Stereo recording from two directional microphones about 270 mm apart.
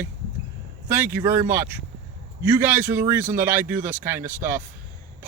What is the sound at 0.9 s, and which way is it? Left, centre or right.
Speech, centre.